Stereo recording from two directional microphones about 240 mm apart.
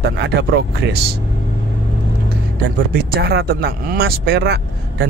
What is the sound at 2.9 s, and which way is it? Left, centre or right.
Speech, right.